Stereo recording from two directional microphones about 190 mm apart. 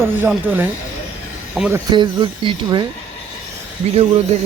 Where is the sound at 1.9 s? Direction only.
25° right (ahead or behind).